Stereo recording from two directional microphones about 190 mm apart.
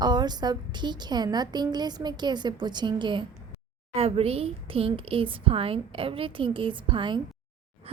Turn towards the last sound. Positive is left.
turn(degrees=-25)  # may be behind; listen again after turning